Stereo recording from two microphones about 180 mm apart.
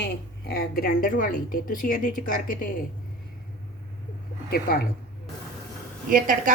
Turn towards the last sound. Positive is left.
turn(degrees=-50)  # may be behind; listen again after turning